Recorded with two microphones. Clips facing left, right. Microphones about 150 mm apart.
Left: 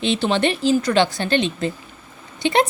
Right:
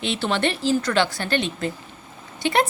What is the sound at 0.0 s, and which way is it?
A woman's voice, 20° left (ahead or behind).